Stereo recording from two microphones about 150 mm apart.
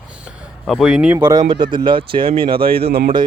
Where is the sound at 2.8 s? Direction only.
90° right.